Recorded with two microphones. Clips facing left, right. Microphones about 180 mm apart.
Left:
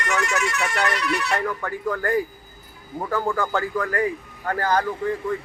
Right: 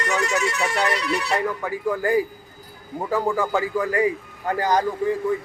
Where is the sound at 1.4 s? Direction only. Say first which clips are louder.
Right 2 dB; 10° right (ahead or behind).